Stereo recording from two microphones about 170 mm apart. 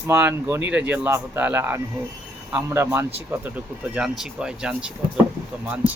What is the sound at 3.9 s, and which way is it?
Speech, 5° right (ahead or behind).